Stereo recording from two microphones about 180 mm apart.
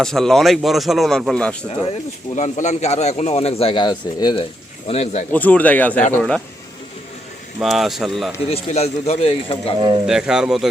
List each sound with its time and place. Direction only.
0.0 s a man's voice: 5° left (ahead or behind)
2.3 s a man's voice: 40° left (ahead or behind); by 4.4 s 25° left (ahead or behind)
4.9 s a man's voice: 35° left (ahead or behind)
5.3 s a man's voice: 10° left (ahead or behind)
7.6 s a man's voice: centre (ahead or behind)
8.4 s a man's voice: 35° left (ahead or behind)
10.1 s a man's voice: 5° right (ahead or behind)